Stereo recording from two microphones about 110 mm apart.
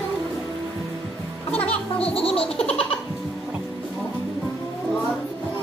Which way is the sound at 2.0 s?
60° left (ahead or behind).